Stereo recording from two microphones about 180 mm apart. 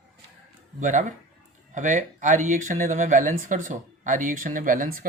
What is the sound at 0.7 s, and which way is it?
Speech, 45° right (ahead or behind).